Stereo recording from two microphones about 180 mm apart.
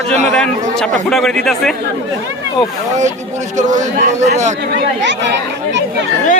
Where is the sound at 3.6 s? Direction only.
40° right (ahead or behind).